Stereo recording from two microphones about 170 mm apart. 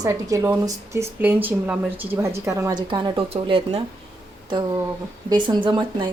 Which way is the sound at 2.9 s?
30° right (ahead or behind).